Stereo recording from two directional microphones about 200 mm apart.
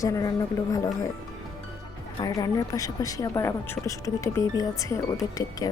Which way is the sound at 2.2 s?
15° left (ahead or behind).